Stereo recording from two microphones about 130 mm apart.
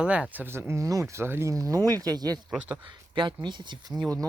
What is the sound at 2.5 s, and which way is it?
Speech, 10° right (ahead or behind).